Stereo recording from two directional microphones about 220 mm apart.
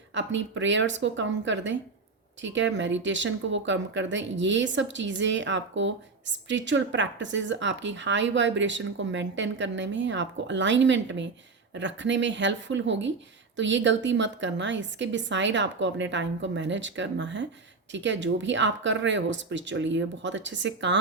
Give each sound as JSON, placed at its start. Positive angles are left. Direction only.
{"t": 0.1, "sound": "speech", "side_deg": -55}